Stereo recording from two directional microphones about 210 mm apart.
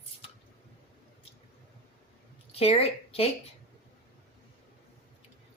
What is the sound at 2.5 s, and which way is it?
Speech, 30° left (ahead or behind).